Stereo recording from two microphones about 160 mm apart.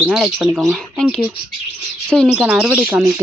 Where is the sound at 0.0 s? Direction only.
Centre (ahead or behind).